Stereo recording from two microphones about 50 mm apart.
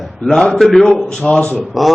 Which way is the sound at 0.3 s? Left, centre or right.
Centre.